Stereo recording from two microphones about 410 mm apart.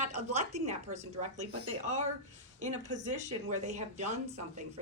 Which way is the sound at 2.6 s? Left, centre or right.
Centre.